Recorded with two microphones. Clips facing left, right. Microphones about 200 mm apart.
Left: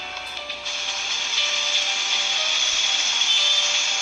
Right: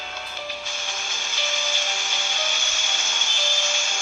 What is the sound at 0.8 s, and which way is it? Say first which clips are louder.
Music: right 2 dB; 45° right (ahead or behind).